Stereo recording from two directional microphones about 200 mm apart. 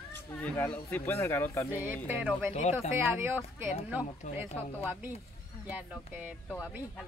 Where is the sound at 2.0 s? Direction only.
10° right (ahead or behind).